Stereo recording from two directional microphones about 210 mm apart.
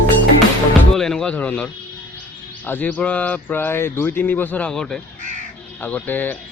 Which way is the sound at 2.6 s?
10° left (ahead or behind).